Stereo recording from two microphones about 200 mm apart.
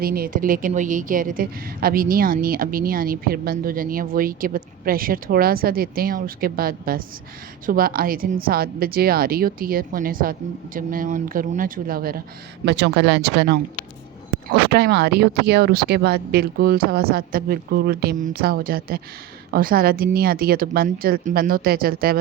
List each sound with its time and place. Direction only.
0.0 s a woman's voice: 45° right (ahead or behind)
12.6 s speech: 60° right (ahead or behind)
14.7 s a woman's voice: 55° right (ahead or behind)